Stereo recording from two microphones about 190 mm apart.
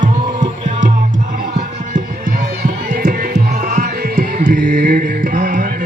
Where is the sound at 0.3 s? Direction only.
40° right (ahead or behind).